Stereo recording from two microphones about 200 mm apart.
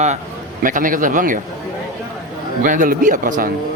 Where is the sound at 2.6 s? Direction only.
40° right (ahead or behind).